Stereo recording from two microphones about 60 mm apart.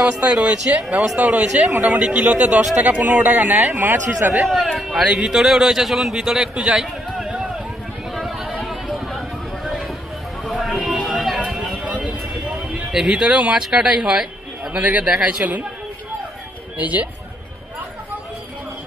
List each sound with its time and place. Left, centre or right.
0.0 s a man's voice: centre; by 4.4 s right
4.6 s speech: centre
7.2 s vehicle: centre
8.1 s a sound: centre
11.0 s music: centre
11.8 s a sound: right
13.6 s a man's voice: centre; by 15.6 s right
16.7 s a man's voice: right